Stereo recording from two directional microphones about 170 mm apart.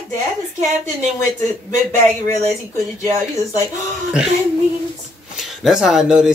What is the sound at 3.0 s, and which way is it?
Speech, 15° left (ahead or behind).